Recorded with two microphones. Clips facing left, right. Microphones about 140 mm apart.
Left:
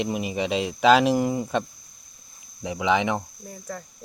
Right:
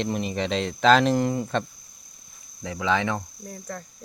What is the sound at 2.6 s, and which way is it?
Speech, 15° left (ahead or behind).